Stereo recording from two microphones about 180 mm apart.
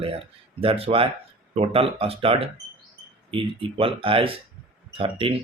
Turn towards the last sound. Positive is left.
turn(degrees=-30)  # may be behind; listen again after turning